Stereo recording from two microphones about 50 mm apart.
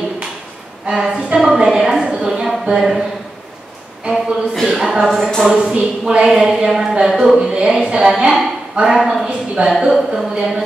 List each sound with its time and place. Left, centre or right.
0.8 s a woman's voice: centre
2.8 s a woman's voice: centre
4.1 s a woman's voice: centre
5.6 s a woman's voice: centre